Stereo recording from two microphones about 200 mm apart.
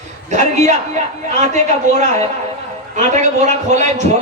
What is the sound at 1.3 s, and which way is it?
A man's voice, 35° right (ahead or behind).